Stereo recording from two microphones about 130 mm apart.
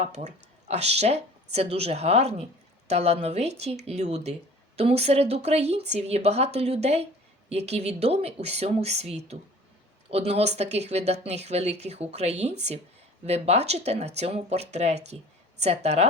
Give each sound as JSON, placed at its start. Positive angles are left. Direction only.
{"t": 0.0, "sound": "a woman's voice", "side_deg": -60}